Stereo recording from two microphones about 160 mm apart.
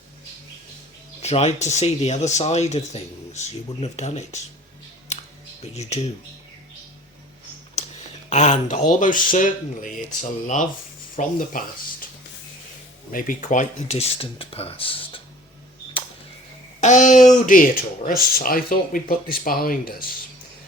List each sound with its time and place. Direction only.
1.2 s speech: 45° left (ahead or behind)
5.6 s speech: 40° left (ahead or behind)
8.3 s speech: 45° left (ahead or behind)
13.1 s speech: 55° left (ahead or behind); by 15.2 s 35° left (ahead or behind)
16.8 s speech: 50° left (ahead or behind)